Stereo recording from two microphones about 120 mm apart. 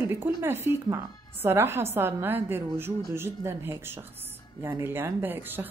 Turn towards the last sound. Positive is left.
turn(degrees=-15)  # may be behind; listen again after turning